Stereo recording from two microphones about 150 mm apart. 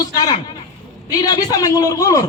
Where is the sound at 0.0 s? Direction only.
25° left (ahead or behind).